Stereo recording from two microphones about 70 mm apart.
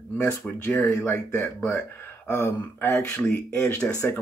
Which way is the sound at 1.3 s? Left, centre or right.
Left.